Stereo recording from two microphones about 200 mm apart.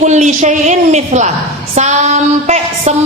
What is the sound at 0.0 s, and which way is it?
A man's voice, 35° right (ahead or behind).